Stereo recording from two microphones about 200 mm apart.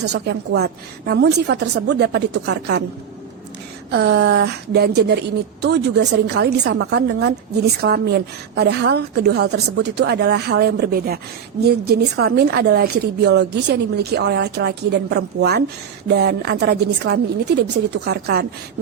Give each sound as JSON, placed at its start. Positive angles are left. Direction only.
{"t": 0.0, "sound": "a woman's voice", "side_deg": -55}
{"t": 3.9, "sound": "a woman's voice", "side_deg": -55}